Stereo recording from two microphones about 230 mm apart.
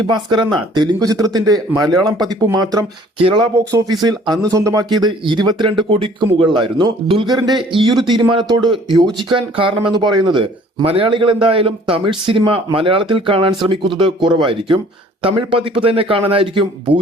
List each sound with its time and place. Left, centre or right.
0.1 s speech: centre